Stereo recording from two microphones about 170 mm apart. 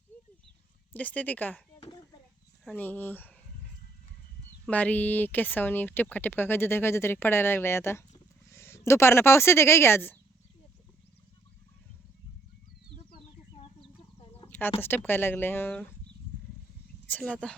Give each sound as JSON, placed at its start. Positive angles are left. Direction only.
{"t": 0.9, "sound": "speech", "side_deg": 10}
{"t": 2.6, "sound": "speech", "side_deg": 10}
{"t": 4.6, "sound": "speech", "side_deg": 10}
{"t": 14.4, "sound": "chicken", "side_deg": 10}
{"t": 14.8, "sound": "speech", "side_deg": 10}
{"t": 17.1, "sound": "speech", "side_deg": 10}